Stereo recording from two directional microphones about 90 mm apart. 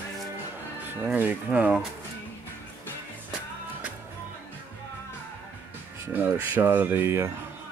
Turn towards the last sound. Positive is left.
turn(degrees=-30)  # may be behind; listen again after turning